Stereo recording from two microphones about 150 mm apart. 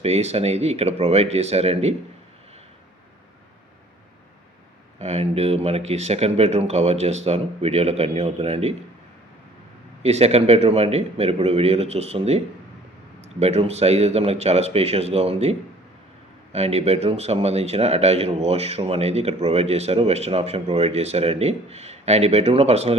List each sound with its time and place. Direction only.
0.0 s speech: 45° right (ahead or behind)
4.9 s speech: 45° right (ahead or behind)
10.0 s speech: 45° right (ahead or behind)